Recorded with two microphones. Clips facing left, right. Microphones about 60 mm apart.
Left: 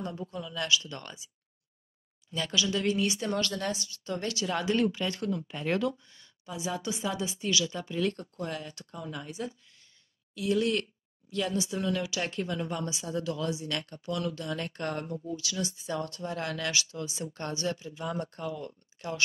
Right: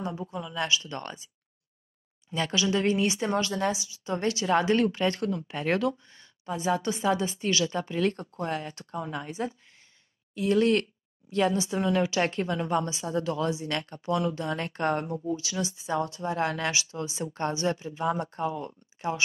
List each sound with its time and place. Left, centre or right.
0.0 s speech: centre; by 1.3 s right
2.2 s speech: right; by 4.1 s centre
4.1 s speech: right
6.0 s speech: right